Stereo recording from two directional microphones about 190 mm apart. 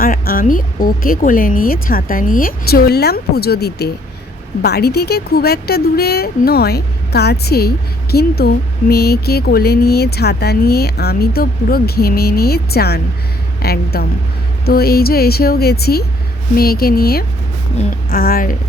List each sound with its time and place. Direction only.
0.0 s speech: 50° left (ahead or behind)